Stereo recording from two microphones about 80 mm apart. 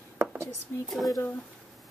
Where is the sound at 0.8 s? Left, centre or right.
Centre.